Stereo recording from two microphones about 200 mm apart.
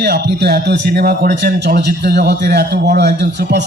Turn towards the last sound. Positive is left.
turn(degrees=-60)  # may be behind; listen again after turning